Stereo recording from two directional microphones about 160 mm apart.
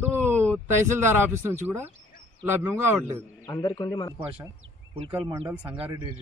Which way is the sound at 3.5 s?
25° left (ahead or behind).